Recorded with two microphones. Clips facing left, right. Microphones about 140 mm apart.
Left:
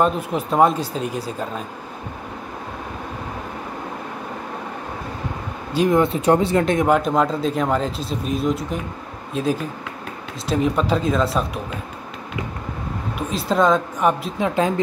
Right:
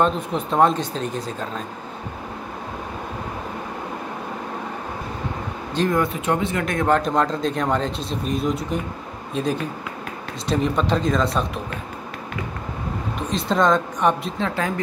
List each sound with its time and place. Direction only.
0.0 s speech: 5° left (ahead or behind)
5.9 s speech: 25° left (ahead or behind)
6.2 s speech: 35° left (ahead or behind)
6.8 s speech: 5° left (ahead or behind)
13.3 s speech: 5° left (ahead or behind)
14.4 s speech: 20° left (ahead or behind)